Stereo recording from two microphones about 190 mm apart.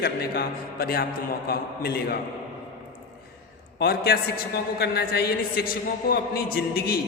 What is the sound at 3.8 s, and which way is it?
A man's voice, 55° left (ahead or behind).